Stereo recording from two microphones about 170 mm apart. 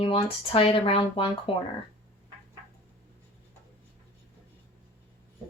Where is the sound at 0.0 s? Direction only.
35° left (ahead or behind).